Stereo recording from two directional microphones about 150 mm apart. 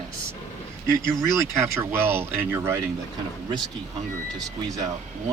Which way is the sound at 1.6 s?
15° right (ahead or behind).